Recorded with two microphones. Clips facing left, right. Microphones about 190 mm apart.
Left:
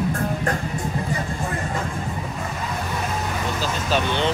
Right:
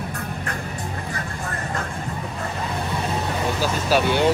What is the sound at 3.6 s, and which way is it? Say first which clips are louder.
Speech: right 3 dB; 10° right (ahead or behind).